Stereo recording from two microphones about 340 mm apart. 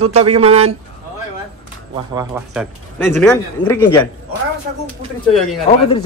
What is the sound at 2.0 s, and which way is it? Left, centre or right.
A man's voice, centre.